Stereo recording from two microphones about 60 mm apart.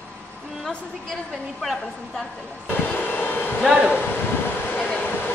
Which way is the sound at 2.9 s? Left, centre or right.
Left.